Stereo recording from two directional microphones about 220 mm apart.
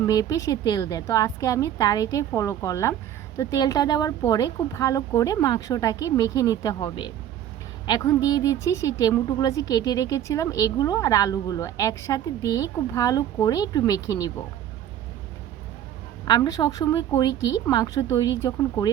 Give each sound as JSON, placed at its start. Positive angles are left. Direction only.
{"t": 0.0, "sound": "a woman's voice", "side_deg": 15}
{"t": 16.2, "sound": "a woman's voice", "side_deg": 20}